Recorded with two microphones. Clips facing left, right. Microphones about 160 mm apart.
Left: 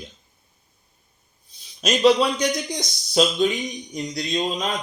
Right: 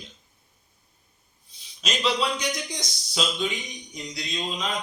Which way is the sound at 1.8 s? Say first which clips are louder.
Left 9 dB; 45° left (ahead or behind).